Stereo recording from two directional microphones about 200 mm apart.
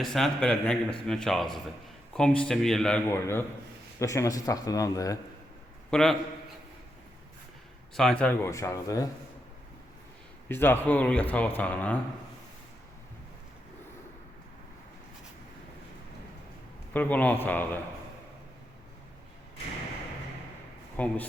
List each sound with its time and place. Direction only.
0.0 s speech: centre (ahead or behind); by 5.1 s 15° left (ahead or behind)
5.9 s speech: centre (ahead or behind)
7.9 s speech: 5° left (ahead or behind)
10.5 s speech: 10° left (ahead or behind)
16.9 s speech: 10° left (ahead or behind)
20.9 s speech: 5° left (ahead or behind)